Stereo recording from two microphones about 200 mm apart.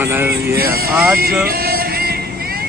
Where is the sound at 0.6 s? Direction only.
50° right (ahead or behind).